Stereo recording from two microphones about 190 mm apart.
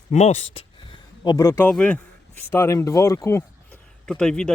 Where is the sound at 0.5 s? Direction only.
25° left (ahead or behind).